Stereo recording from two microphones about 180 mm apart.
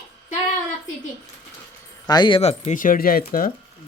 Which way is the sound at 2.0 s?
25° left (ahead or behind).